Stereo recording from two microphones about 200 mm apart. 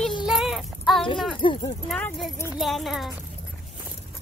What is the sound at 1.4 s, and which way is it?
Speech, 25° left (ahead or behind).